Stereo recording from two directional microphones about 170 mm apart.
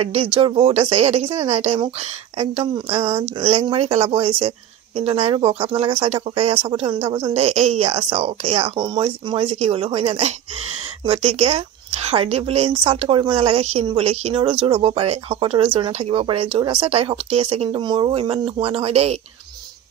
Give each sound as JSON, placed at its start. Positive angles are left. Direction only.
{"t": 0.0, "sound": "speech", "side_deg": -35}